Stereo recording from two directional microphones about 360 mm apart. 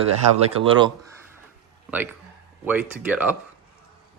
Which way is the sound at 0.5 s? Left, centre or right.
Centre.